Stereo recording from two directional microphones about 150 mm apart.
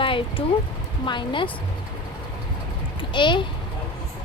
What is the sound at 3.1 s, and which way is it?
Speech, 30° left (ahead or behind).